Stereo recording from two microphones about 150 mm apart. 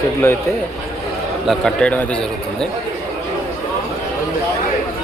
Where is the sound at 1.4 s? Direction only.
5° left (ahead or behind).